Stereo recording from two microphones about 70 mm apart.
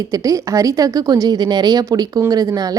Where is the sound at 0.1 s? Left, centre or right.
Right.